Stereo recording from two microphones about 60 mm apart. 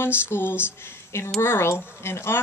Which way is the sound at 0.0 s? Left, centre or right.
Left.